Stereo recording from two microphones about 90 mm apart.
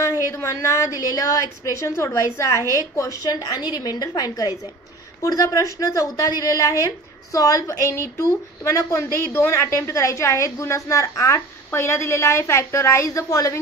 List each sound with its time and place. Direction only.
0.0 s a woman's voice: 35° left (ahead or behind)
9.3 s a woman's voice: 25° left (ahead or behind)